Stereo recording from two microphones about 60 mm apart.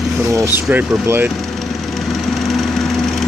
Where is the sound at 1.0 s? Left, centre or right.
Right.